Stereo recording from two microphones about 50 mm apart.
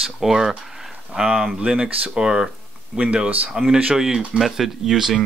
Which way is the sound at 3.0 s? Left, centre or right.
Right.